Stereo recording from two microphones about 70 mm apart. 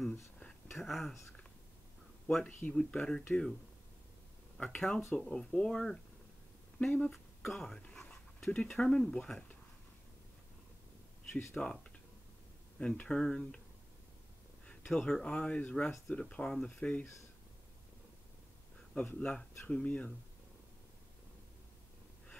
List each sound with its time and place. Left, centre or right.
0.1 s a sound: centre
0.7 s speech: centre
2.2 s speech: centre
4.6 s speech: centre
11.3 s speech: centre
14.9 s speech: centre
19.1 s speech: centre